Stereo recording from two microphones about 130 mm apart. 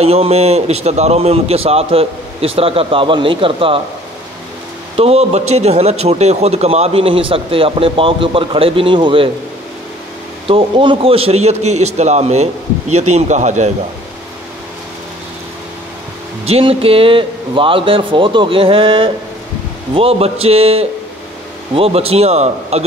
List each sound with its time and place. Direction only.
0.0 s a man's voice: 50° right (ahead or behind)
4.9 s a man's voice: 50° right (ahead or behind)
10.4 s a man's voice: 45° right (ahead or behind); by 13.7 s 65° right (ahead or behind)
16.4 s a man's voice: 50° right (ahead or behind)